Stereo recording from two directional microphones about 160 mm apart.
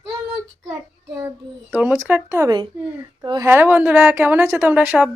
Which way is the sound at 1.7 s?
10° right (ahead or behind).